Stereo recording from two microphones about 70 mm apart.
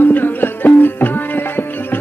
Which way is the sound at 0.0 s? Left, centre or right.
Left.